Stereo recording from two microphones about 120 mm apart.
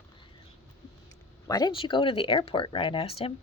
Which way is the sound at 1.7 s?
45° left (ahead or behind).